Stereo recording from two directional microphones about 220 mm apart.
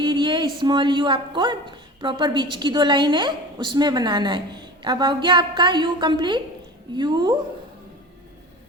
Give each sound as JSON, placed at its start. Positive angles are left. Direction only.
{"t": 0.0, "sound": "a woman's voice", "side_deg": -20}